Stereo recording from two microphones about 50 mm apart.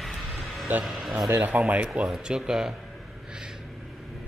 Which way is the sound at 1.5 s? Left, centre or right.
Right.